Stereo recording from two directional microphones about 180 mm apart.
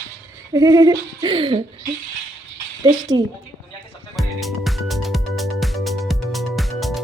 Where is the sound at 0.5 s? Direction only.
20° right (ahead or behind).